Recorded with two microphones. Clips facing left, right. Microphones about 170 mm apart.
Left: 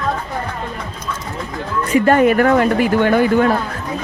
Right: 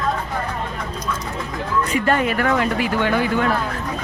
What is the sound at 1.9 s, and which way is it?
Speech, 45° left (ahead or behind).